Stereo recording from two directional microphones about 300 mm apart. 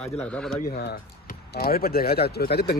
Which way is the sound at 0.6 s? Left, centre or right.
Left.